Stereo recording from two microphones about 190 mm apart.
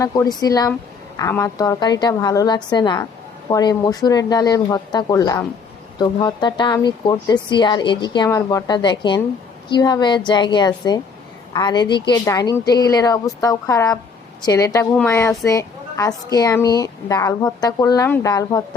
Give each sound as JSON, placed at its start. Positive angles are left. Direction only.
{"t": 0.0, "sound": "a woman's voice", "side_deg": 20}